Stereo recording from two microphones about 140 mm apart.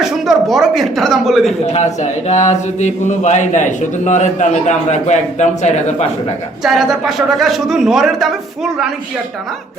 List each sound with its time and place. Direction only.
0.0 s speech: centre (ahead or behind)
1.6 s speech: 55° left (ahead or behind)
6.6 s a man's voice: centre (ahead or behind)